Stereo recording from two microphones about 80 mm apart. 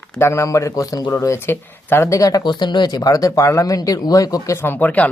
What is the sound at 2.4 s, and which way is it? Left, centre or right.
Speech, left.